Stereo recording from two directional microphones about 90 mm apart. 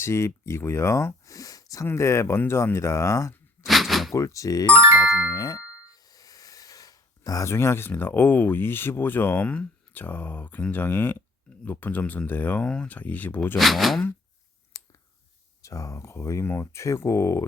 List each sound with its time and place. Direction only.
0.0 s speech: 30° left (ahead or behind)
3.7 s a sound: centre (ahead or behind)
4.1 s speech: 35° left (ahead or behind)
4.7 s music: 30° right (ahead or behind)
5.3 s a sound: 45° left (ahead or behind); by 11.2 s 20° left (ahead or behind)
11.6 s speech: 20° left (ahead or behind)
12.6 s speech: 10° left (ahead or behind)
13.6 s speech: centre (ahead or behind)
14.7 s clicking: 40° left (ahead or behind)
15.6 s speech: 35° left (ahead or behind)